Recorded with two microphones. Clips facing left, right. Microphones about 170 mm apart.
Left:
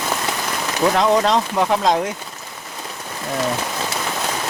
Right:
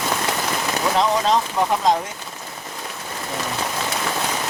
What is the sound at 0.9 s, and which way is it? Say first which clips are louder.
Speech: left 1 dB; 70° left (ahead or behind).